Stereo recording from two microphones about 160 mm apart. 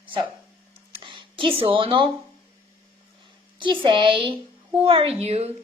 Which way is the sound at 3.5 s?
30° right (ahead or behind).